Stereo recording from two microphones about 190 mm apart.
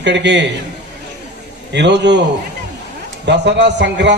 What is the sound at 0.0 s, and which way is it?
Speech, 65° right (ahead or behind).